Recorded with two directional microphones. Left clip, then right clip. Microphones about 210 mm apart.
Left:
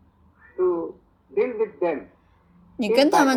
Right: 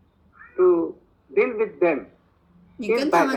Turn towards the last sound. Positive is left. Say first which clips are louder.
# left 4 dB
turn(degrees=40)  # may be behind; listen again after turning